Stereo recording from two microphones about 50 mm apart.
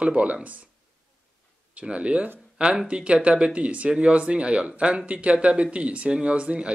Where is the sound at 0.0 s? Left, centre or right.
Right.